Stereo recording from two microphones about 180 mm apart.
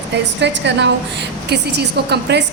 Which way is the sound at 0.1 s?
75° right (ahead or behind).